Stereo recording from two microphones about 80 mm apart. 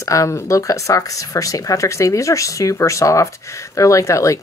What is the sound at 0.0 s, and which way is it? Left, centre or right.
Speech, left.